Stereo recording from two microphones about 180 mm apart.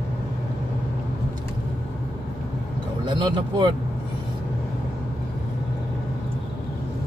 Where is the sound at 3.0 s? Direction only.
25° right (ahead or behind).